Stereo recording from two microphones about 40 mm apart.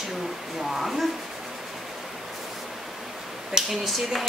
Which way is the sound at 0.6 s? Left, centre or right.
Centre.